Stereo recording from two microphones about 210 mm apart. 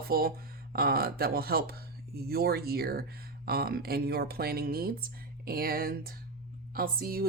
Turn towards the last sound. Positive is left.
turn(degrees=-45)  # may be behind; listen again after turning